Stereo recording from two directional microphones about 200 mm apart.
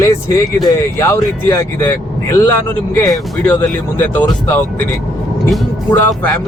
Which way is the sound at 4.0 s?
10° left (ahead or behind).